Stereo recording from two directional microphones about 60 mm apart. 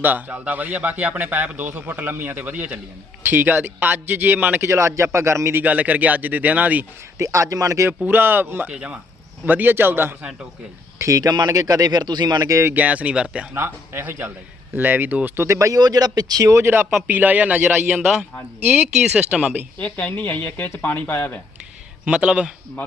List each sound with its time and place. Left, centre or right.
0.0 s a man's voice: right
4.7 s a man's voice: right
5.5 s a man's voice: right
7.2 s a man's voice: right
8.0 s a man's voice: right
8.7 s a man's voice: centre
9.5 s a man's voice: right
10.9 s speech: right
12.7 s a man's voice: right
13.5 s a man's voice: right
15.4 s speech: right
16.6 s a man's voice: right
19.8 s speech: left
22.0 s speech: centre